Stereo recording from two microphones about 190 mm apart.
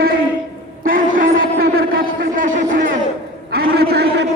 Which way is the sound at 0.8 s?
45° right (ahead or behind).